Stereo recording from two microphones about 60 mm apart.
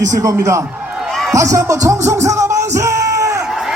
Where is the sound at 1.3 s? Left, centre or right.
Right.